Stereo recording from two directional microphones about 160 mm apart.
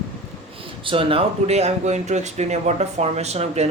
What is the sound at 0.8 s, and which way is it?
Speech, 35° right (ahead or behind).